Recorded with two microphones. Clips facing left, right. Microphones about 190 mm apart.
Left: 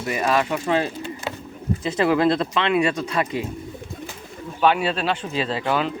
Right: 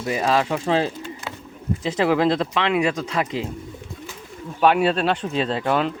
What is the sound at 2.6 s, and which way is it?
Speech, 15° right (ahead or behind).